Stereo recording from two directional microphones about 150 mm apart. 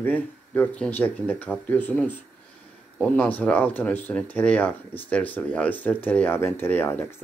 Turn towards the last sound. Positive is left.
turn(degrees=15)  # may be behind; listen again after turning